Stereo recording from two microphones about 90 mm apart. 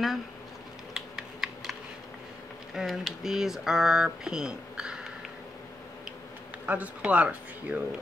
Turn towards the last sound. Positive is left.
turn(degrees=-15)  # may be behind; listen again after turning